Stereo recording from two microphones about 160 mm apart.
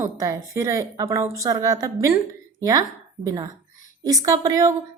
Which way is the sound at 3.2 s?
25° right (ahead or behind).